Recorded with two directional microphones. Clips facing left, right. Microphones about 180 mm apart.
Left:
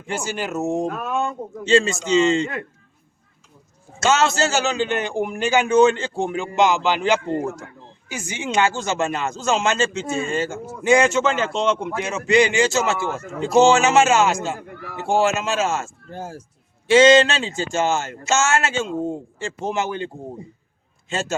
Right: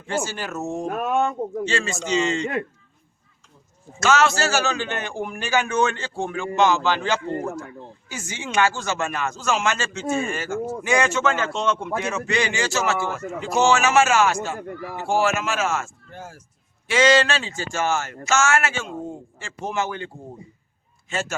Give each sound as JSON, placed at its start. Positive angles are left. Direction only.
{"t": 0.1, "sound": "a man's voice", "side_deg": 15}
{"t": 4.0, "sound": "a man's voice", "side_deg": 25}
{"t": 21.1, "sound": "a man's voice", "side_deg": 25}